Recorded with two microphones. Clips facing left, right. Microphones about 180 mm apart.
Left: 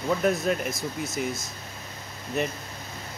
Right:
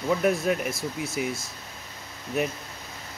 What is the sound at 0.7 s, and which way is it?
Speech, 30° right (ahead or behind).